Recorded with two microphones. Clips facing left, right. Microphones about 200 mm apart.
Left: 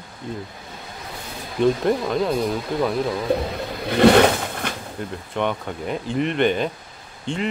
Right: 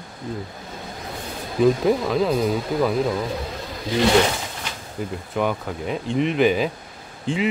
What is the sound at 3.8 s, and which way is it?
Roaring cats, 60° left (ahead or behind).